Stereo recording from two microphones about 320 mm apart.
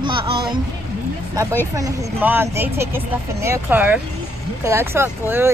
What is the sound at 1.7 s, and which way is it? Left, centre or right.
Speech, centre.